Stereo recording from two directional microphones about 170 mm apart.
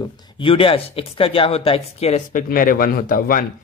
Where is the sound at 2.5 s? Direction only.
55° left (ahead or behind).